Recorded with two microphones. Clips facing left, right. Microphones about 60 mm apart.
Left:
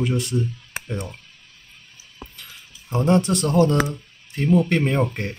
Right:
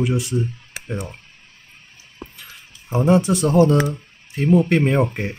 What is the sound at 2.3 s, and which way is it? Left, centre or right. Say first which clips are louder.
Speech: right 1 dB; centre.